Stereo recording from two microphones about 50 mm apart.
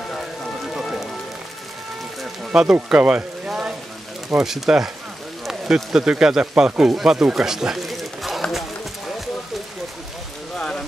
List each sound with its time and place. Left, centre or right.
0.7 s music: centre
2.5 s speech: centre
3.4 s frying: centre
4.4 s speech: centre
5.4 s a sound: centre
5.9 s speech: centre